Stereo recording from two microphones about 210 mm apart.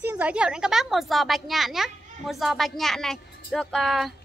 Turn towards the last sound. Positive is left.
turn(degrees=0)  # may be behind; listen again after turning